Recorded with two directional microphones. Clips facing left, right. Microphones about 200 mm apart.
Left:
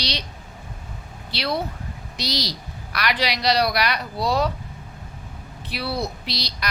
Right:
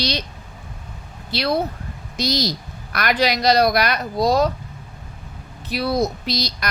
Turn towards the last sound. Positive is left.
turn(degrees=-45)  # may be behind; listen again after turning